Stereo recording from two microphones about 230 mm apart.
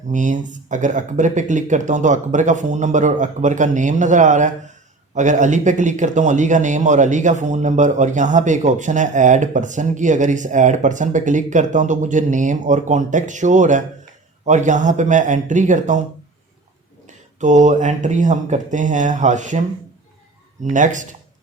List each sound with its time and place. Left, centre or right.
0.1 s speech: right
17.1 s speech: right
20.7 s speech: right